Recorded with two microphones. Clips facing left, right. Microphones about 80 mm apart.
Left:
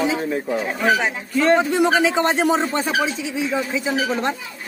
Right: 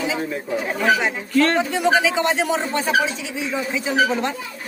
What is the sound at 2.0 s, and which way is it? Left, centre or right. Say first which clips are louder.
Speech: left 2 dB; left.